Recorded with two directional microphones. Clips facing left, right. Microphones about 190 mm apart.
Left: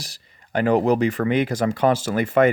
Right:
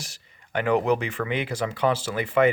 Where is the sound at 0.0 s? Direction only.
35° left (ahead or behind).